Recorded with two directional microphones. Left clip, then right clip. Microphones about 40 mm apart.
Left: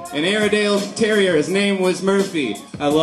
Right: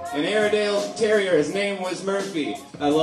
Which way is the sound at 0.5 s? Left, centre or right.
Left.